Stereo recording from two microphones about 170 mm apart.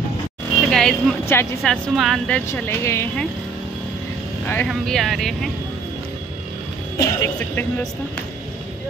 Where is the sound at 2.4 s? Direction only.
15° left (ahead or behind).